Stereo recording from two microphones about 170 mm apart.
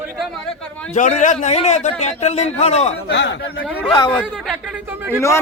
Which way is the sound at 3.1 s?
90° left.